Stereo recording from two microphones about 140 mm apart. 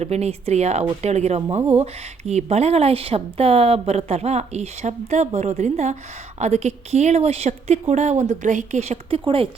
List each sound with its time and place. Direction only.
0.0 s a woman's voice: 50° right (ahead or behind)